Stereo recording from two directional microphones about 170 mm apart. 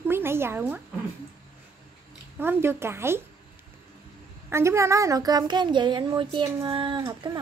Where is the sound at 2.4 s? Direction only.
15° right (ahead or behind).